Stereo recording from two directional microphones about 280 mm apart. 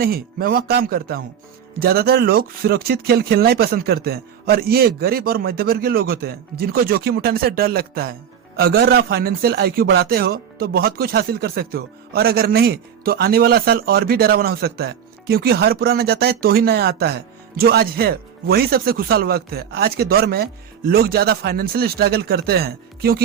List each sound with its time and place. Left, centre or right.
0.0 s a man's voice: right